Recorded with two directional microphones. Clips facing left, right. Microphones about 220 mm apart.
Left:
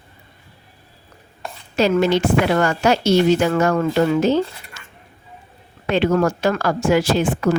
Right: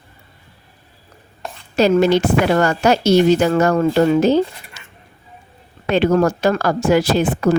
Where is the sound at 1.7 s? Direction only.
40° right (ahead or behind).